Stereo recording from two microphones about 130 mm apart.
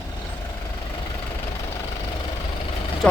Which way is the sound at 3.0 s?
10° left (ahead or behind).